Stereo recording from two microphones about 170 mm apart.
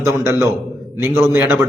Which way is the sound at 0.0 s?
15° right (ahead or behind).